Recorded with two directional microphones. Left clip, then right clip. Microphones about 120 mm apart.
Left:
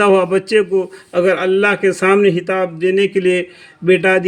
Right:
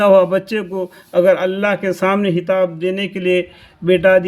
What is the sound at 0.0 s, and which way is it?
A man's voice, 40° left (ahead or behind).